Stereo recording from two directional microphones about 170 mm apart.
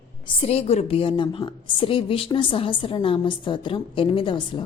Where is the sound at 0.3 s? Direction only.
35° left (ahead or behind).